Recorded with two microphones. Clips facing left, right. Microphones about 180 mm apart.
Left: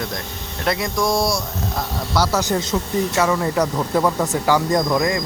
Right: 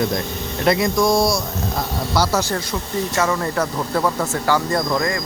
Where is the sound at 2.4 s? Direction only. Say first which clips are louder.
Left 3 dB; 20° left (ahead or behind).